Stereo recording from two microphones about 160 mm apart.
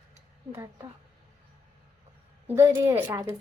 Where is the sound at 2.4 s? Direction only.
15° right (ahead or behind).